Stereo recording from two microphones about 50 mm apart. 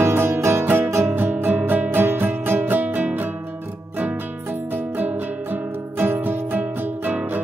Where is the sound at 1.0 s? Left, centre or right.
Right.